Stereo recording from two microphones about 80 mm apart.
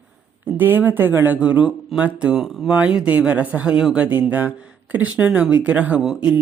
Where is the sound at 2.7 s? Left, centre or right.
Centre.